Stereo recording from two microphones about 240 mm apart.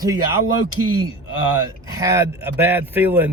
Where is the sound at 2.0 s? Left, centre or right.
Centre.